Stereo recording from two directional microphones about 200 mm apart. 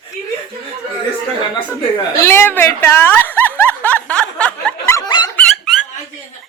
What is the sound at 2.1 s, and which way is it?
Snicker, 15° left (ahead or behind).